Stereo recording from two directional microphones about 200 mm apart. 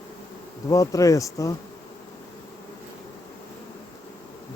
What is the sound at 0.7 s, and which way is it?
Speech, 15° left (ahead or behind).